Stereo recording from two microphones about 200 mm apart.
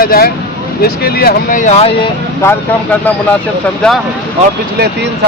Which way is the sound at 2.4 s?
10° left (ahead or behind).